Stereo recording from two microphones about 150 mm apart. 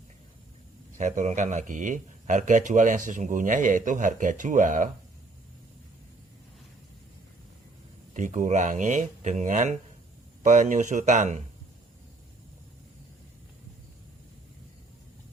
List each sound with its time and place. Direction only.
0.9 s a man's voice: 55° right (ahead or behind)
8.1 s a man's voice: 55° right (ahead or behind)